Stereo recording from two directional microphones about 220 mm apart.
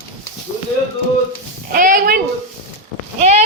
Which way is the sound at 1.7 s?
40° right (ahead or behind).